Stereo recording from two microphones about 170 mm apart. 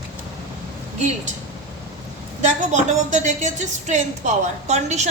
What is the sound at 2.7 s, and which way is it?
A woman's voice, 45° right (ahead or behind).